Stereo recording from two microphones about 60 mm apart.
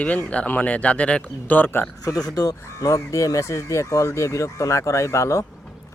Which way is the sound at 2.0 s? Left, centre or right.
Left.